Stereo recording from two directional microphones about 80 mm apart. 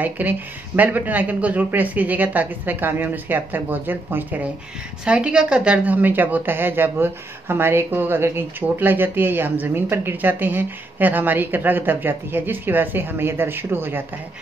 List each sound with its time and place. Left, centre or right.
0.0 s a woman's voice: right
5.0 s a woman's voice: centre; by 14.0 s right